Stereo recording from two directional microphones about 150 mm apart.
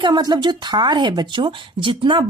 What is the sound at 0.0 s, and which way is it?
Speech, 30° right (ahead or behind).